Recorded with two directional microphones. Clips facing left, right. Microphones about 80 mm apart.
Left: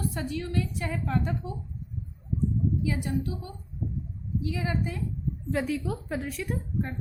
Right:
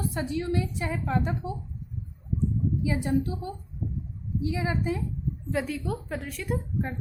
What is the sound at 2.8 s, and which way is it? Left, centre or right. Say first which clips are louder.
A woman's voice: right 3 dB; right.